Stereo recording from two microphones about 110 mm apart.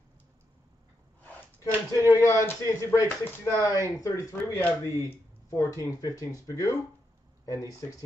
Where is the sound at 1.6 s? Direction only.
30° left (ahead or behind).